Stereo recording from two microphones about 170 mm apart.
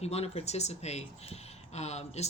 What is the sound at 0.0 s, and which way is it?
Speech, 35° left (ahead or behind).